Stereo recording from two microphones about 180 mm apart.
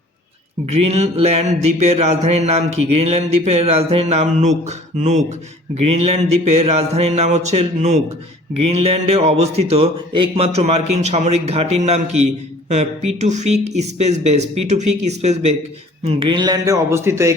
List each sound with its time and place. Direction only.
0.6 s speech: 35° right (ahead or behind); by 17.3 s 15° right (ahead or behind)